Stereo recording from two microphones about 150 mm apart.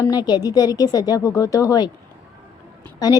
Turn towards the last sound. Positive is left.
turn(degrees=25)  # may be behind; listen again after turning